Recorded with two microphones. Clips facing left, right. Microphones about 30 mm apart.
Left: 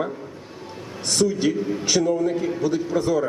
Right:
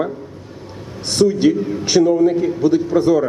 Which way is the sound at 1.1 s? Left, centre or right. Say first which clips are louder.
Right 7 dB; right.